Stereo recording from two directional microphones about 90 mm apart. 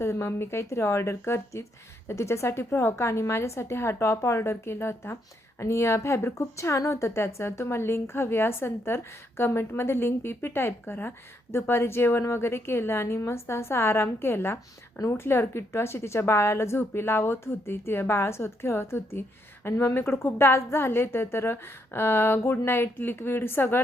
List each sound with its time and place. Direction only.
0.0 s a woman's voice: 30° left (ahead or behind)